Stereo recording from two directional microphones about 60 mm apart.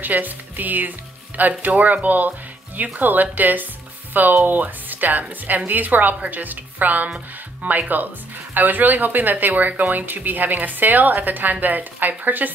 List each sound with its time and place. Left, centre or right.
0.0 s speech: right